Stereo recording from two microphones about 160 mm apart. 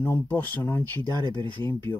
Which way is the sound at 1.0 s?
30° right (ahead or behind).